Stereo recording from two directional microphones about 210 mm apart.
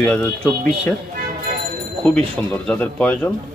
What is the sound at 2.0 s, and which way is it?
Speech, 5° left (ahead or behind).